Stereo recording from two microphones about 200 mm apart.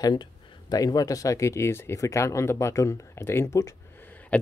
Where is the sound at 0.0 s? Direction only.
20° left (ahead or behind).